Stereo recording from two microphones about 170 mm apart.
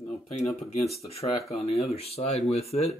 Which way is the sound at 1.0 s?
35° left (ahead or behind).